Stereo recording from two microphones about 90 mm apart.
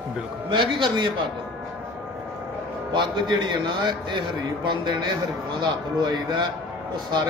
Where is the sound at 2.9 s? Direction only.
55° right (ahead or behind).